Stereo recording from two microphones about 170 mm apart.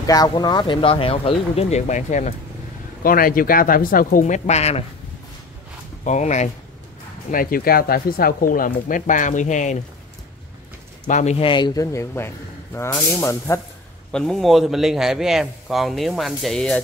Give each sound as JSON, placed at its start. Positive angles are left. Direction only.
{"t": 0.0, "sound": "speech", "side_deg": 20}
{"t": 3.0, "sound": "speech", "side_deg": 60}
{"t": 6.0, "sound": "speech", "side_deg": 45}
{"t": 7.2, "sound": "speech", "side_deg": 55}
{"t": 11.1, "sound": "speech", "side_deg": 45}
{"t": 14.1, "sound": "a man's voice", "side_deg": 5}